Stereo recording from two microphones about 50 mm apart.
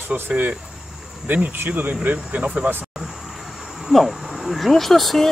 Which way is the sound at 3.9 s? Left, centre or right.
Centre.